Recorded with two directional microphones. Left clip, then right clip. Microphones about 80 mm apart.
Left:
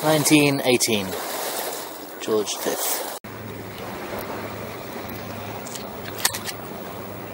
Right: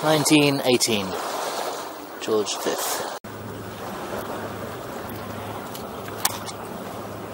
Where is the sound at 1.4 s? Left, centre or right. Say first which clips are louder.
Right 1 dB; left.